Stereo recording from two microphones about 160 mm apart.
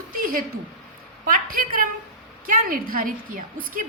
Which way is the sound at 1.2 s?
60° right (ahead or behind).